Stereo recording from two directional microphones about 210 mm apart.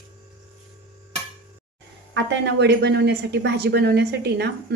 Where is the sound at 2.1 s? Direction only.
60° right (ahead or behind).